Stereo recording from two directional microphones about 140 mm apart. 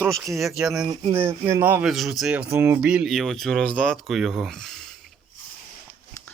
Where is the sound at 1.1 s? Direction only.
15° right (ahead or behind).